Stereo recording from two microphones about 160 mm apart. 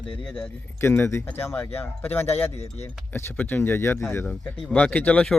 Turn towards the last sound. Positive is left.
turn(degrees=10)  # may be behind; listen again after turning